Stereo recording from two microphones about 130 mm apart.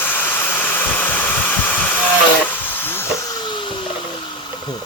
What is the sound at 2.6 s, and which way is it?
Hiss, 15° left (ahead or behind).